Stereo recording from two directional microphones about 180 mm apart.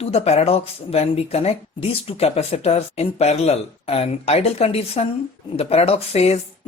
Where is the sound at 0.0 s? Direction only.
35° left (ahead or behind).